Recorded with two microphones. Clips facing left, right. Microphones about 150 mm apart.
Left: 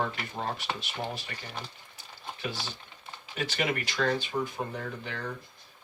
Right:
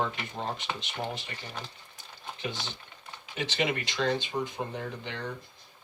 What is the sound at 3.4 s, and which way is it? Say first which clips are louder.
Speech: even; 20° right (ahead or behind).